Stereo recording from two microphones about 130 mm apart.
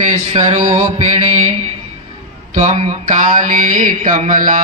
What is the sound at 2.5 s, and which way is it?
Mantra, 65° right (ahead or behind).